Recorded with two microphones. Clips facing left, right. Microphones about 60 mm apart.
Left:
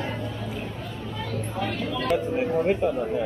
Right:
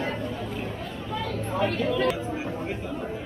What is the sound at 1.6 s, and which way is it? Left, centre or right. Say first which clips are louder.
Chatter: right 5 dB; right.